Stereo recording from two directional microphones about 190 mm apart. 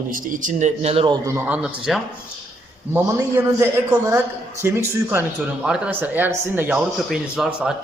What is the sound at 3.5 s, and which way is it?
A man's voice, 15° right (ahead or behind).